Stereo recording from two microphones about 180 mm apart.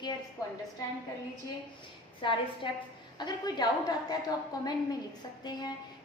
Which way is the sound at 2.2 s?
30° left (ahead or behind).